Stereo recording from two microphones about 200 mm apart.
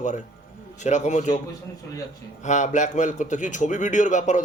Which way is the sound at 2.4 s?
35° left (ahead or behind).